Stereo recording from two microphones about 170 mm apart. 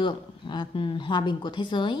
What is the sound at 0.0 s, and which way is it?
Speech, 25° left (ahead or behind).